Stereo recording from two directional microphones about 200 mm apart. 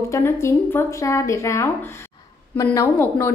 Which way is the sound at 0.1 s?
15° left (ahead or behind).